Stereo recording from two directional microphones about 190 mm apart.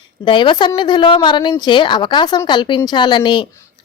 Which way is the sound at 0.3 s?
25° left (ahead or behind).